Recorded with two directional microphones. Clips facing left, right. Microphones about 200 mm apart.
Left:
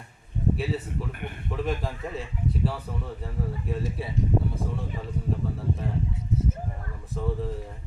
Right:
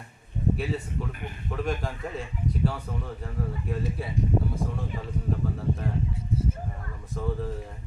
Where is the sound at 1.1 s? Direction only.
55° left (ahead or behind).